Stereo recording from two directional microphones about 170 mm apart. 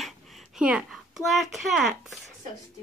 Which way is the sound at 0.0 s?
Centre (ahead or behind).